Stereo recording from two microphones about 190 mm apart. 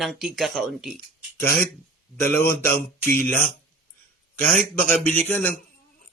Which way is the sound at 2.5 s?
10° left (ahead or behind).